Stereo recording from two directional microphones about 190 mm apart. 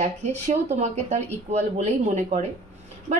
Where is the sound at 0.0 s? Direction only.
35° right (ahead or behind).